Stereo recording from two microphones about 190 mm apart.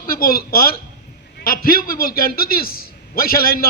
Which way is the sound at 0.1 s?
50° left (ahead or behind).